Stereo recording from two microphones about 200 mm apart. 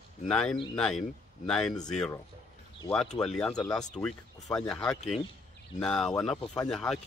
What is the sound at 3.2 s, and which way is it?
Speech, 5° left (ahead or behind).